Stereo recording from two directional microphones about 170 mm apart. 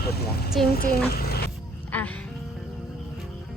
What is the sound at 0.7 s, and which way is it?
Speech, 65° left (ahead or behind).